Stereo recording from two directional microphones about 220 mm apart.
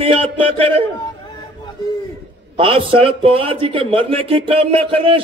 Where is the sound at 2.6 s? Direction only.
25° right (ahead or behind).